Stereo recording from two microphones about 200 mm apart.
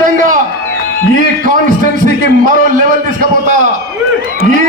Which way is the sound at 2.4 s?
40° right (ahead or behind).